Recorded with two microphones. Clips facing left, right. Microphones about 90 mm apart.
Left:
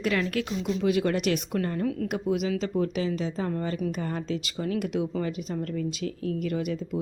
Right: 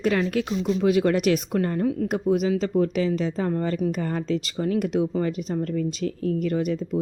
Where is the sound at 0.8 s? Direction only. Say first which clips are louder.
Right 5 dB; 40° right (ahead or behind).